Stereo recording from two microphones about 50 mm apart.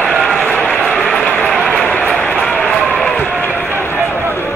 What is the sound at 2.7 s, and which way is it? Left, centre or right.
Run, left.